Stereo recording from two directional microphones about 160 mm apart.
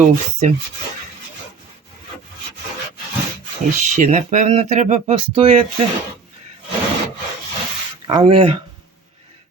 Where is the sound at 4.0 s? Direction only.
50° right (ahead or behind).